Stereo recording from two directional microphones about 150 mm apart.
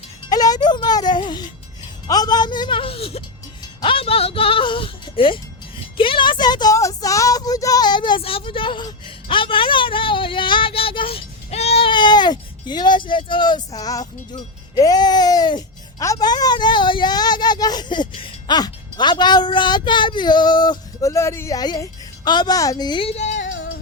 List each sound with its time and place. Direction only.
0.3 s music: 25° left (ahead or behind)
2.0 s a sound: 25° left (ahead or behind)
6.0 s speech: 35° left (ahead or behind)
23.1 s music: 50° left (ahead or behind)